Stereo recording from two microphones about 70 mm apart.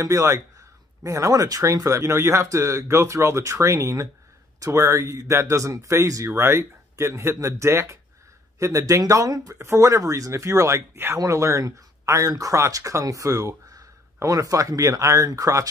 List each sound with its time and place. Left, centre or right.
0.0 s speech: right
6.3 s speech: right
9.6 s speech: right